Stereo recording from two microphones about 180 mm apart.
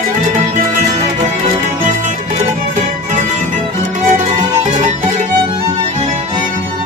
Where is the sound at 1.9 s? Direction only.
40° right (ahead or behind).